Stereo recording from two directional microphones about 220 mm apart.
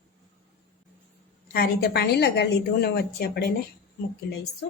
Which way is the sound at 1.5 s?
45° left (ahead or behind).